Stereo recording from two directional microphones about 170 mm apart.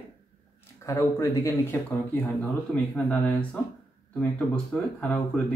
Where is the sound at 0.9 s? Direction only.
15° left (ahead or behind).